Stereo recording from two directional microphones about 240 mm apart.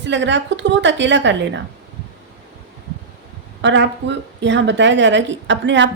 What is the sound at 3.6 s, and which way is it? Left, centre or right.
A woman's voice, right.